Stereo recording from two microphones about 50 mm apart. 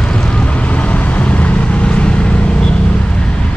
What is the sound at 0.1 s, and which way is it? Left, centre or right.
Vehicle, left.